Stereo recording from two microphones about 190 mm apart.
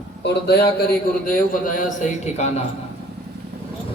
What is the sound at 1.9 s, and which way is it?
Speech, 40° left (ahead or behind).